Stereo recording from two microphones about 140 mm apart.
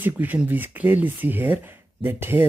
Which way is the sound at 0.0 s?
10° right (ahead or behind).